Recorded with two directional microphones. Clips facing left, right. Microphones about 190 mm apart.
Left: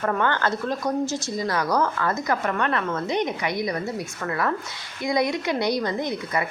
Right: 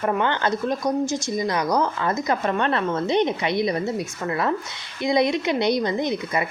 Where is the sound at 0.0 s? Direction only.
20° right (ahead or behind).